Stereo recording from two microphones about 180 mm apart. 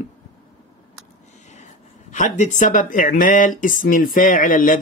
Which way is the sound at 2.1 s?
40° left (ahead or behind).